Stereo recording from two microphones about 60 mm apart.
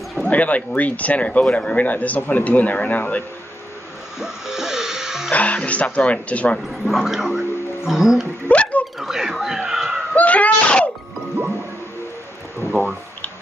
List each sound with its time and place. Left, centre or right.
0.2 s a man's voice: left
4.2 s music: centre
5.3 s a man's voice: left
6.7 s speech: centre
8.5 s a sound: left
9.0 s speech: centre
10.1 s a sound: left